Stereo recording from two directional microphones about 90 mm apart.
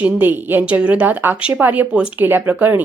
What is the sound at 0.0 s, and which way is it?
Speech, 20° right (ahead or behind).